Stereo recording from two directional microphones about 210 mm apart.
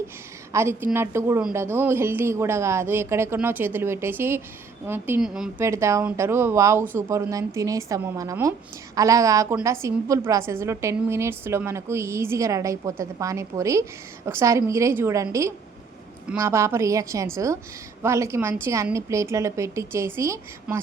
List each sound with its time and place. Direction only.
0.5 s a woman's voice: 10° right (ahead or behind)
5.6 s a woman's voice: 15° right (ahead or behind)